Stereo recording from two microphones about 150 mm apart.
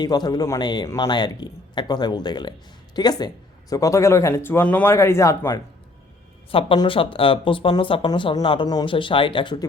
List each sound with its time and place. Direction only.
0.0 s speech: 25° left (ahead or behind)
6.5 s speech: 35° left (ahead or behind)